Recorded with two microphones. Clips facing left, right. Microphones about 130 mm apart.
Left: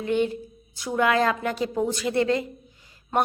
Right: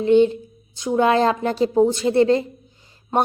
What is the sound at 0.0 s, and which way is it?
A woman's voice, 25° right (ahead or behind).